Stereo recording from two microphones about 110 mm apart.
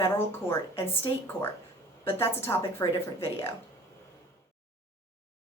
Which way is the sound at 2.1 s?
20° left (ahead or behind).